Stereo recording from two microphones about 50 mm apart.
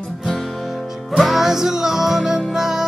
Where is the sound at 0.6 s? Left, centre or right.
Centre.